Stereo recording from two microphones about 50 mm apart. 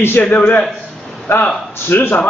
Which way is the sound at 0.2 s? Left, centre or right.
Left.